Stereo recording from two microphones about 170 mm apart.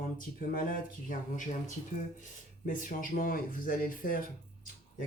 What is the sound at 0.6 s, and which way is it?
Speech, 50° left (ahead or behind).